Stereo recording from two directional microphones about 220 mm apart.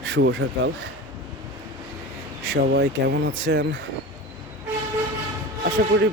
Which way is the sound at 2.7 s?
50° right (ahead or behind).